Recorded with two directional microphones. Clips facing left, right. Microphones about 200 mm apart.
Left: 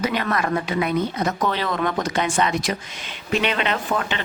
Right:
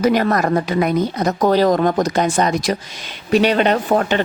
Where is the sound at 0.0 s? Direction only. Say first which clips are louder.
Right 7 dB; 40° right (ahead or behind).